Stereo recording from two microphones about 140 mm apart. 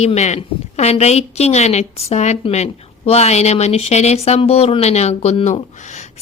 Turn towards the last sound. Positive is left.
turn(degrees=60)  # may be behind; listen again after turning